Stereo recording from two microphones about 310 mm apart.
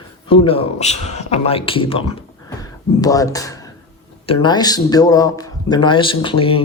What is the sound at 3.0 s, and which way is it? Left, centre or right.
Speech, centre.